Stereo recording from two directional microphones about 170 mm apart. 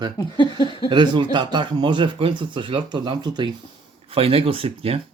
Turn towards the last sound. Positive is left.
turn(degrees=-35)  # may be behind; listen again after turning